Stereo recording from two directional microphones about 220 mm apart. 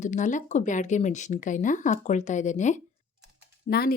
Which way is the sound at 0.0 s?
35° left (ahead or behind).